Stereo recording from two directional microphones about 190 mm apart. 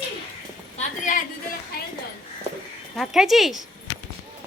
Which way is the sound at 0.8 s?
40° left (ahead or behind).